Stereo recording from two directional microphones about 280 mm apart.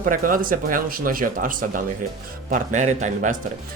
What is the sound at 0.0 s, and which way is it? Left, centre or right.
Speech, right.